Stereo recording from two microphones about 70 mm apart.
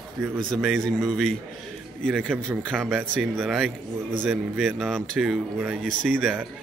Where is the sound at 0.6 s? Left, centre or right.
Centre.